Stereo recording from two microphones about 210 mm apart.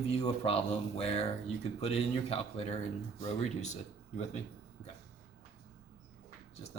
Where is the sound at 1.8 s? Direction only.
30° left (ahead or behind).